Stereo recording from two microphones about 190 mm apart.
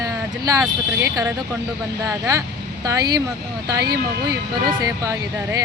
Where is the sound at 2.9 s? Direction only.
20° right (ahead or behind).